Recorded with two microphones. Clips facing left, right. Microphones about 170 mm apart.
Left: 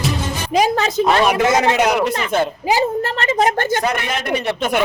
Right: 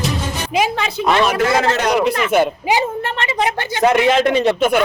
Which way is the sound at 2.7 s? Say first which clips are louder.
Left 4 dB; 40° left (ahead or behind).